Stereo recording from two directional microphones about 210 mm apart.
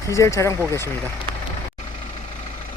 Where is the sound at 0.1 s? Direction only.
15° left (ahead or behind).